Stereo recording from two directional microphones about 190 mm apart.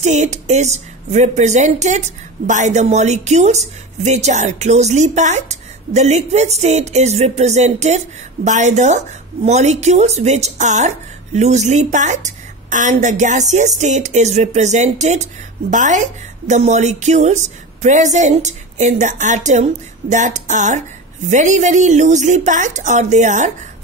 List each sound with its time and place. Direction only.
0.0 s speech: 40° right (ahead or behind)